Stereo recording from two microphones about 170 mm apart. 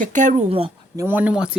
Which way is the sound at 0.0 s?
50° right (ahead or behind).